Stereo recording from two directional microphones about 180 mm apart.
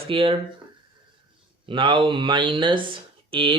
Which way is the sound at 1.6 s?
30° right (ahead or behind).